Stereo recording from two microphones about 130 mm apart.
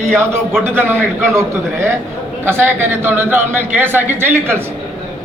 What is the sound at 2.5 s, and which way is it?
A man's voice, 20° right (ahead or behind).